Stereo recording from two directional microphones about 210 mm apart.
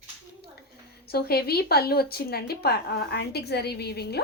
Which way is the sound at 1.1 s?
50° left (ahead or behind).